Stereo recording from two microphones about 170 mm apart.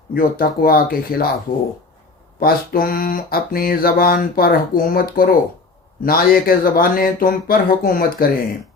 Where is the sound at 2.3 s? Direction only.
60° left (ahead or behind).